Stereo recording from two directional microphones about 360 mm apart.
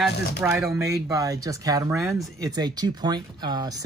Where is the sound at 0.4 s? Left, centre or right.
Centre.